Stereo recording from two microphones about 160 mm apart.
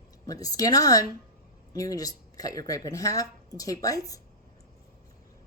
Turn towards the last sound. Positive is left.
turn(degrees=20)  # may be behind; listen again after turning